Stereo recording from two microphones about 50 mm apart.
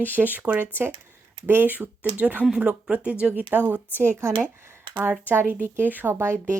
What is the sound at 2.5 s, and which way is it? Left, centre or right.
Speech, centre.